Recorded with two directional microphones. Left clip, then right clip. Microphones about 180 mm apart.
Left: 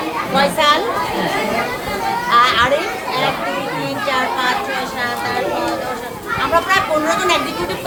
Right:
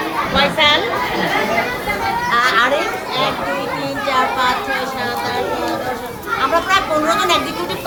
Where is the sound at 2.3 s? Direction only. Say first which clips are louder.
Left 2 dB; 10° left (ahead or behind).